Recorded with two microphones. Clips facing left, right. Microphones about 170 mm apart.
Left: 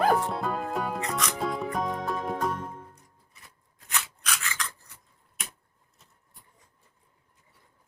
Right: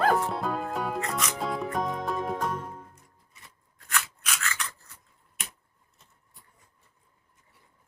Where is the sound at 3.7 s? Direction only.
20° left (ahead or behind).